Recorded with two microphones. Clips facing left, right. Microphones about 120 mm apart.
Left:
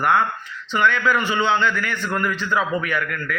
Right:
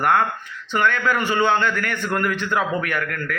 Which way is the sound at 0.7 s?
50° right (ahead or behind).